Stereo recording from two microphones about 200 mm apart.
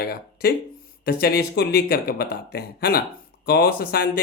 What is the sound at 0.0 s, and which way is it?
Speech, 50° left (ahead or behind).